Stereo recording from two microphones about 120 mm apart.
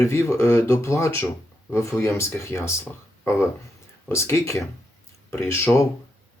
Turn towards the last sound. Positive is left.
turn(degrees=25)  # may be behind; listen again after turning